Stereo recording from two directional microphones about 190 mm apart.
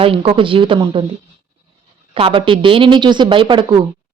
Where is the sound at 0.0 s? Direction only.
30° right (ahead or behind).